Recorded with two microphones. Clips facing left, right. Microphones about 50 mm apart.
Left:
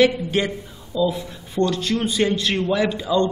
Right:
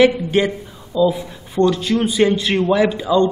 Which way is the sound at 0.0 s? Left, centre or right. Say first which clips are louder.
Right 4 dB; centre.